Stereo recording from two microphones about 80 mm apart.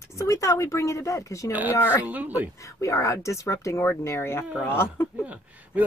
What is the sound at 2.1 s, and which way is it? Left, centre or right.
Speech, right.